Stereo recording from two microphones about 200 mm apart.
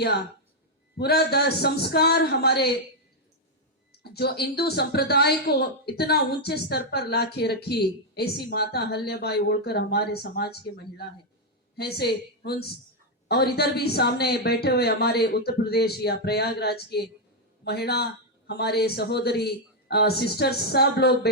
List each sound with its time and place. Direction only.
0.9 s a woman's voice: 55° left (ahead or behind)
3.9 s a woman's voice: 55° left (ahead or behind)